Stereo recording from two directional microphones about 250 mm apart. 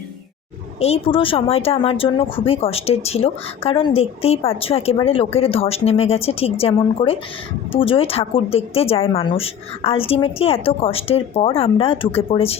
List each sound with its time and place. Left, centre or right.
0.8 s speech: left